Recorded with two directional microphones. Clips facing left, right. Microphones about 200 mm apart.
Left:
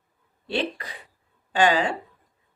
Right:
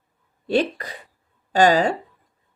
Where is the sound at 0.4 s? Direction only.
45° right (ahead or behind).